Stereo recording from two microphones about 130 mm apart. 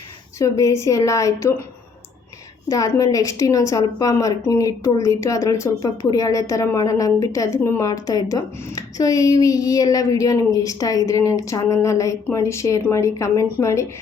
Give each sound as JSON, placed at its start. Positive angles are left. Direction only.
{"t": 0.3, "sound": "a woman's voice", "side_deg": 25}
{"t": 2.6, "sound": "a woman's voice", "side_deg": 25}